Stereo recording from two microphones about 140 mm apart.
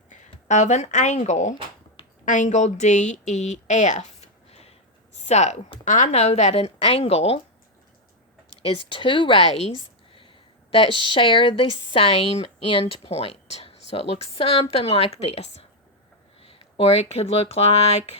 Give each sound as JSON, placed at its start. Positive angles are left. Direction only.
{"t": 0.1, "sound": "a woman's voice", "side_deg": 60}
{"t": 8.9, "sound": "speech", "side_deg": 35}
{"t": 10.1, "sound": "a sound", "side_deg": 40}
{"t": 11.0, "sound": "speech", "side_deg": 35}